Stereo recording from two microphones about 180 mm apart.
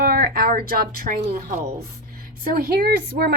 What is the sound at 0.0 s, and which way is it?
A woman's voice, 55° right (ahead or behind).